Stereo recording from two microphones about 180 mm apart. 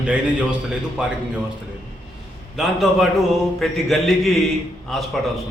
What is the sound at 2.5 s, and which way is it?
A man's voice, centre (ahead or behind).